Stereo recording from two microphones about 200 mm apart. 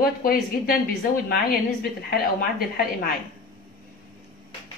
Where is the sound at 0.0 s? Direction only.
45° left (ahead or behind).